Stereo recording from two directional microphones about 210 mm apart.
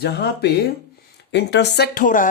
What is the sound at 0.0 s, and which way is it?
Speech, 50° left (ahead or behind).